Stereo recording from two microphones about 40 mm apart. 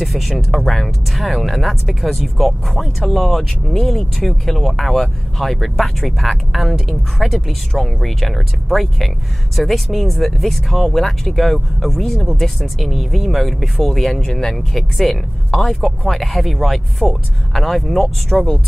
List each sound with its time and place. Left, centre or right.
0.0 s speech: centre
0.6 s speech: centre
0.8 s speech: centre
12.7 s speech: centre
15.8 s speech: centre